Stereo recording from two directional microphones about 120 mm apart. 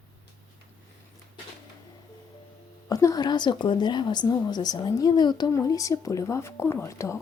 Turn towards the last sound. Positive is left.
turn(degrees=25)  # may be behind; listen again after turning